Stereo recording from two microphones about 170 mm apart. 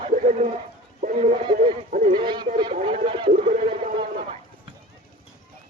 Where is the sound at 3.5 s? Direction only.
50° right (ahead or behind).